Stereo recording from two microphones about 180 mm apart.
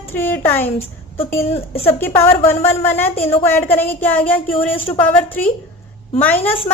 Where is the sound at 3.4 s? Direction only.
10° left (ahead or behind).